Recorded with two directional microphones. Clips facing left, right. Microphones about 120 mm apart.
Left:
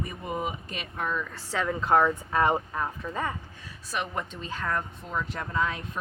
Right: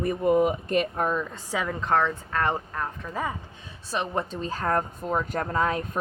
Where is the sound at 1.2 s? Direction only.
15° right (ahead or behind).